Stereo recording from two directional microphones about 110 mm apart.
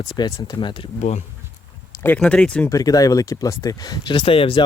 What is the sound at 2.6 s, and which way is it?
Speech, 35° left (ahead or behind).